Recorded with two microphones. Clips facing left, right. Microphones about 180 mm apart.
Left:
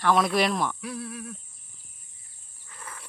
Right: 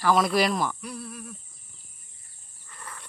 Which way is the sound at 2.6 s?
5° left (ahead or behind).